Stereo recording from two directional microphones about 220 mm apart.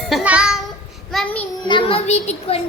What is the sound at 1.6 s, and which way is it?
A child's voice, 25° left (ahead or behind).